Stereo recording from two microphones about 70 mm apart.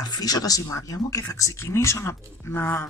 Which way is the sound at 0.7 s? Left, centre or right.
Left.